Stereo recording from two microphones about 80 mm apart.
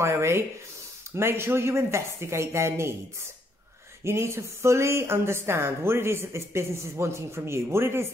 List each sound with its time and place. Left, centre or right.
0.0 s a woman's voice: right
4.0 s a woman's voice: right